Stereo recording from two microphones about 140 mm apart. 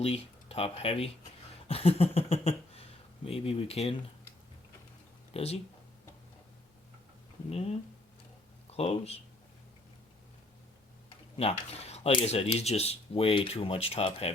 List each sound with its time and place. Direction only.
0.0 s speech: 45° left (ahead or behind)
1.6 s a sound: 45° left (ahead or behind)
3.2 s speech: 45° left (ahead or behind)
5.3 s speech: 45° left (ahead or behind)
8.7 s speech: 45° left (ahead or behind)
11.3 s speech: 50° left (ahead or behind)